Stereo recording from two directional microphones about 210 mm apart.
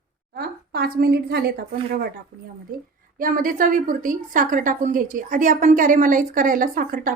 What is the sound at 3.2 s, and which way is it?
A woman's voice, 40° right (ahead or behind).